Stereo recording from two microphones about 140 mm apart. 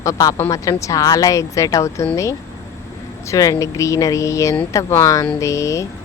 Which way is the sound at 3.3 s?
20° left (ahead or behind).